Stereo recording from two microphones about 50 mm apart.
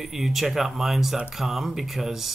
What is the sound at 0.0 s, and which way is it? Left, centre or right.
Speech, centre.